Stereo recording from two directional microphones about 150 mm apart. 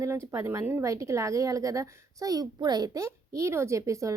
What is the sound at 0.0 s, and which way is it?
A woman's voice, 20° right (ahead or behind).